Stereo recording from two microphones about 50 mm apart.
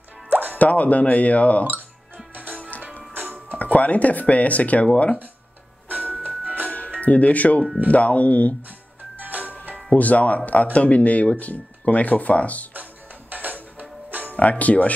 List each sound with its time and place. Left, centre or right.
0.3 s plop: right
0.6 s speech: left
2.3 s music: right
3.5 s speech: left
5.9 s music: right
7.0 s speech: left
8.6 s music: right
9.9 s speech: left
13.3 s music: right
14.3 s speech: left